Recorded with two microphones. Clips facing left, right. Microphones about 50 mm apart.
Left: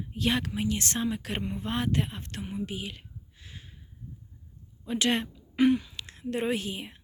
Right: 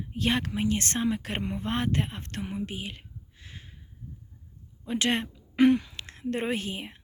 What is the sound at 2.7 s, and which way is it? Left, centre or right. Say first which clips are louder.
Speech: even; right.